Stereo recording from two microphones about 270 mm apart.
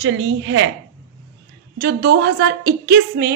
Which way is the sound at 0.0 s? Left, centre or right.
Right.